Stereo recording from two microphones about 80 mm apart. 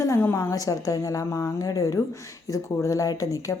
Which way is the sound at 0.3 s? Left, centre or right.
Left.